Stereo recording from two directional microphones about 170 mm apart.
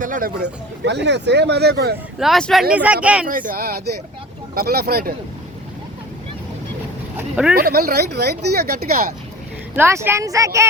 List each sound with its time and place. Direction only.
0.0 s speech: 55° right (ahead or behind)
0.9 s speech: 90° right; by 2.0 s 70° right (ahead or behind)
2.1 s speech: centre (ahead or behind)
3.2 s speech: 55° right (ahead or behind)
7.2 s speech: 5° right (ahead or behind)
7.5 s speech: 65° right (ahead or behind)
9.7 s speech: 15° right (ahead or behind)